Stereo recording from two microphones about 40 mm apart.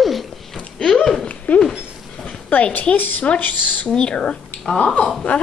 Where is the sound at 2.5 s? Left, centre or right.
Left.